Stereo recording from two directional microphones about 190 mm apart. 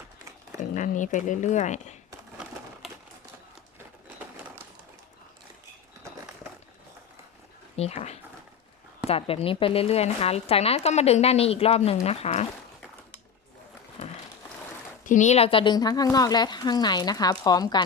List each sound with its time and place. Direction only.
0.6 s a woman's voice: 40° left (ahead or behind)
7.8 s a woman's voice: 35° left (ahead or behind)
15.0 s a woman's voice: 40° left (ahead or behind); by 17.8 s 20° left (ahead or behind)